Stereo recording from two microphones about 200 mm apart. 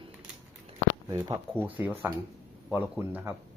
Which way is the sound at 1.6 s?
10° right (ahead or behind).